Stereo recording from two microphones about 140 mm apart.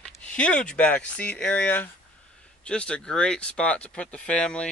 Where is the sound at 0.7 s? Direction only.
10° left (ahead or behind).